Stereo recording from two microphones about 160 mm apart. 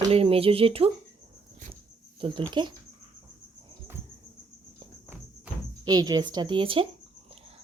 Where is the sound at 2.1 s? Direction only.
30° right (ahead or behind).